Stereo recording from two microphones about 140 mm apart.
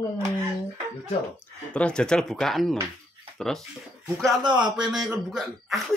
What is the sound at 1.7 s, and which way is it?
Speech, 5° left (ahead or behind).